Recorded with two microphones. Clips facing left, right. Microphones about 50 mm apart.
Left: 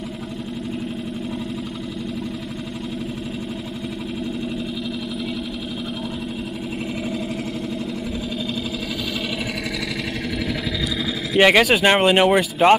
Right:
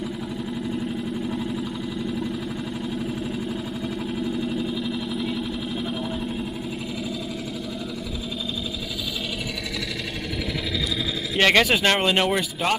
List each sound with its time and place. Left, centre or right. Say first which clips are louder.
11.3 s speech: left 4 dB; centre